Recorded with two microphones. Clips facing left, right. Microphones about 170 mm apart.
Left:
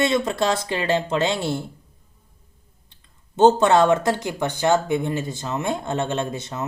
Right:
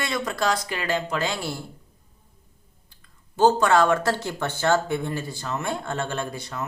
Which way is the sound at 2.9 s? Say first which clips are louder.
Even; 25° left (ahead or behind).